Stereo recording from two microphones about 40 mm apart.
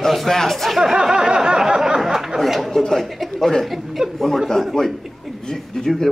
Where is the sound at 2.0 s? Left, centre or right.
Centre.